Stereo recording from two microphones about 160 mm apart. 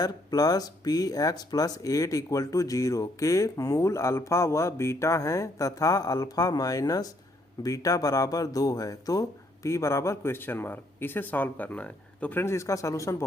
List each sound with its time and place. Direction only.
0.0 s speech: 25° left (ahead or behind)